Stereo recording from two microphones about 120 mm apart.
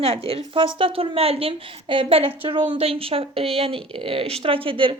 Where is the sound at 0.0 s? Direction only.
50° right (ahead or behind).